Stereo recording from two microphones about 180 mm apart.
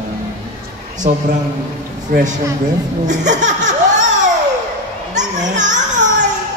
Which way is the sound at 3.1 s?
45° right (ahead or behind).